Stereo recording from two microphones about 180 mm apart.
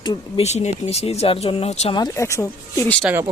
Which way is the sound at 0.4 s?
40° left (ahead or behind).